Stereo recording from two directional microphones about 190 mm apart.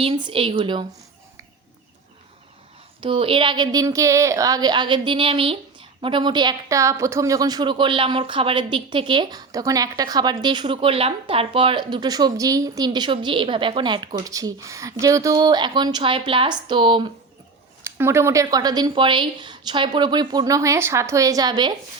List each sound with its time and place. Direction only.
0.0 s a woman's voice: 25° right (ahead or behind)
3.0 s a woman's voice: 30° right (ahead or behind)
17.8 s a woman's voice: 15° right (ahead or behind)